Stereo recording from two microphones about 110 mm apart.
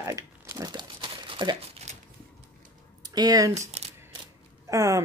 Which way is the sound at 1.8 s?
90° right.